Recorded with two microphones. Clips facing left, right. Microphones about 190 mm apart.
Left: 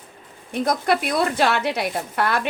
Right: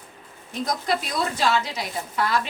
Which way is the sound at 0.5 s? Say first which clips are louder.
Left 5 dB; 60° left (ahead or behind).